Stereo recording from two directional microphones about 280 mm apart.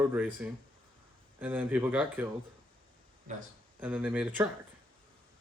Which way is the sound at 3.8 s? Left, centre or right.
Centre.